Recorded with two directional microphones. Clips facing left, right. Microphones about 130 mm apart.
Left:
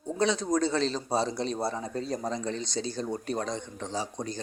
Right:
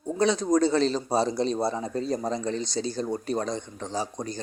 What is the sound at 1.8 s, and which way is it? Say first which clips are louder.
Speech: right 4 dB; 35° right (ahead or behind).